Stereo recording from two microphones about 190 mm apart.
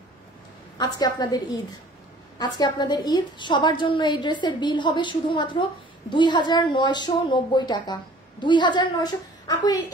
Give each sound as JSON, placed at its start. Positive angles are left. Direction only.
{"t": 0.7, "sound": "a woman's voice", "side_deg": 20}